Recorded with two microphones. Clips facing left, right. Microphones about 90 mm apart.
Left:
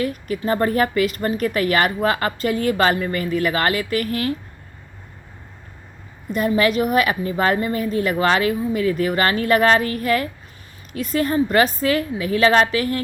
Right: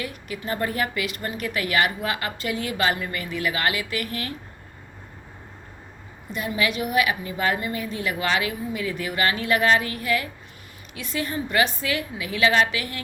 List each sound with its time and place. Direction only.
0.0 s a woman's voice: 40° left (ahead or behind)
6.3 s a woman's voice: 45° left (ahead or behind)